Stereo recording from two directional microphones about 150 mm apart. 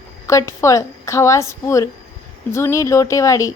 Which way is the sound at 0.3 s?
20° left (ahead or behind).